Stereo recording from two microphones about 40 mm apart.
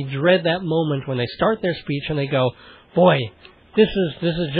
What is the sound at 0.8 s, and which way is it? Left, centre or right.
Speech, left.